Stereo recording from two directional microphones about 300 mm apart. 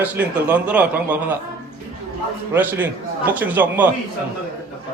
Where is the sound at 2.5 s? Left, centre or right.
Centre.